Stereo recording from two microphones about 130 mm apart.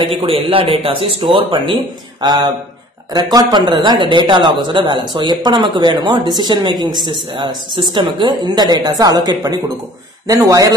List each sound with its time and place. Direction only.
0.0 s a man's voice: 45° right (ahead or behind); by 10.7 s 25° right (ahead or behind)